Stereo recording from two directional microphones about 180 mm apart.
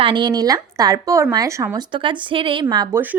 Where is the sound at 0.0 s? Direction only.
25° right (ahead or behind).